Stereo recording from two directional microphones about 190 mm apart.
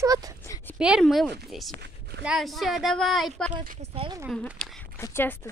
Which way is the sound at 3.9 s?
25° right (ahead or behind).